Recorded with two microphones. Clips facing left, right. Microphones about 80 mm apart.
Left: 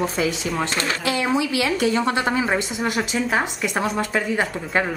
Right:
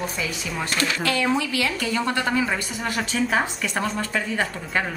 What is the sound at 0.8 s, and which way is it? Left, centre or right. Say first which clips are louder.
A woman's voice: even; centre.